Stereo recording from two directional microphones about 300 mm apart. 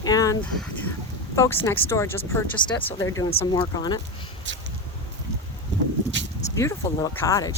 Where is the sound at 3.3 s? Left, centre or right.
Centre.